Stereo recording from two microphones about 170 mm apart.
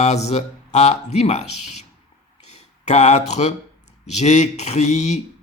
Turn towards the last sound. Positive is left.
turn(degrees=45)  # may be behind; listen again after turning